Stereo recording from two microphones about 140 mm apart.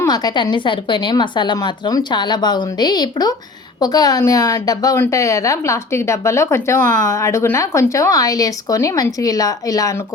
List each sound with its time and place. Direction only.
0.0 s a woman's voice: 30° left (ahead or behind)